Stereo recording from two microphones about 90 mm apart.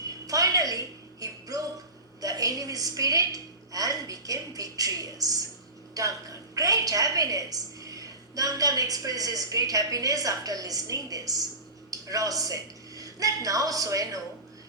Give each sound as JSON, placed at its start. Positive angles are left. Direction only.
{"t": 0.0, "sound": "music", "side_deg": -40}
{"t": 2.2, "sound": "a woman's voice", "side_deg": -40}